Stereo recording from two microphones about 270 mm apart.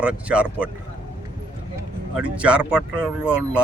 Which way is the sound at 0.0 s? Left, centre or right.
Centre.